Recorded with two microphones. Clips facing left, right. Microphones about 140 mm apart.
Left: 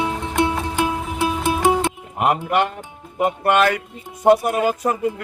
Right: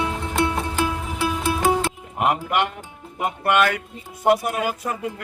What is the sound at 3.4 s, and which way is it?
Speech, 30° left (ahead or behind).